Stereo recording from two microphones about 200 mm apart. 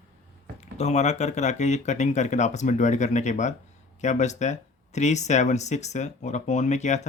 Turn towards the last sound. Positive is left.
turn(degrees=35)  # may be behind; listen again after turning